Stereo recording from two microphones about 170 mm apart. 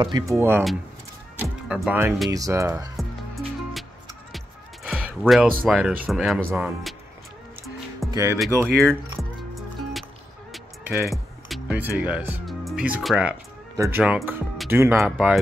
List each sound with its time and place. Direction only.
0.0 s speech: 25° right (ahead or behind)
0.4 s speech: 15° right (ahead or behind)
3.0 s music: centre (ahead or behind)
4.8 s a sound: 5° right (ahead or behind)
5.2 s speech: centre (ahead or behind)
8.1 s speech: 20° right (ahead or behind)
8.6 s speech: 5° left (ahead or behind)
10.5 s music: centre (ahead or behind)
13.7 s speech: 15° right (ahead or behind)
15.0 s speech: centre (ahead or behind)